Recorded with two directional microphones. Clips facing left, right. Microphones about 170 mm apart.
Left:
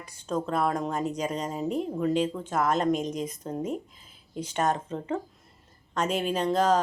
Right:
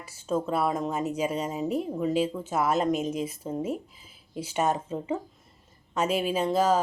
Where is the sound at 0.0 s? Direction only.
5° right (ahead or behind).